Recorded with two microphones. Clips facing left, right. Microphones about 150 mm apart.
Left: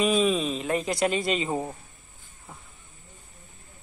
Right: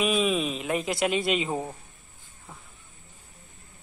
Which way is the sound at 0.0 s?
5° right (ahead or behind).